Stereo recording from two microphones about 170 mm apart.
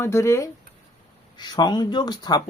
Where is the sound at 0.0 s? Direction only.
15° left (ahead or behind).